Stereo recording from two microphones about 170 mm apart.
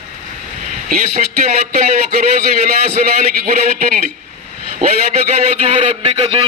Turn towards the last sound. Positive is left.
turn(degrees=-35)  # may be behind; listen again after turning